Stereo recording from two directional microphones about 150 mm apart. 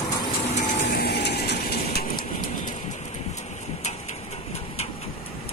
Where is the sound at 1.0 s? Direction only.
90° left.